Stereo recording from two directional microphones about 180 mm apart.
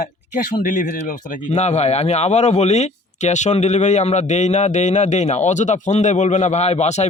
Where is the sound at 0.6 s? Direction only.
45° left (ahead or behind).